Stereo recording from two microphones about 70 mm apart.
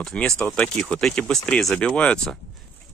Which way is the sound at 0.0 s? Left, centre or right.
Centre.